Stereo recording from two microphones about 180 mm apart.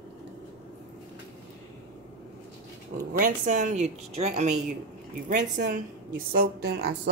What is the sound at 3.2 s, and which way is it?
A woman's voice, 45° right (ahead or behind).